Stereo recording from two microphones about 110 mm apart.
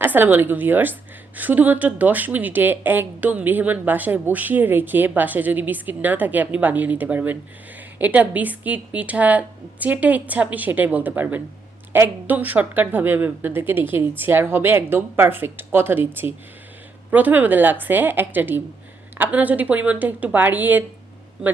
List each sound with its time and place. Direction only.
0.0 s a woman's voice: 15° right (ahead or behind)